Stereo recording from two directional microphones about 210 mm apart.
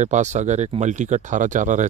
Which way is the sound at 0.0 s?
35° right (ahead or behind).